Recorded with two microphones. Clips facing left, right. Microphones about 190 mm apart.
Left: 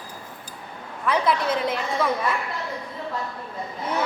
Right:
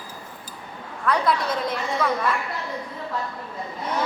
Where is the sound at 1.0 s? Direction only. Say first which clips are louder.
Even; centre (ahead or behind).